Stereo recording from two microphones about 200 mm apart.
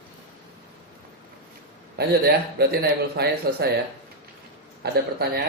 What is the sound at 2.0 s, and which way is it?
A man's voice, 55° right (ahead or behind).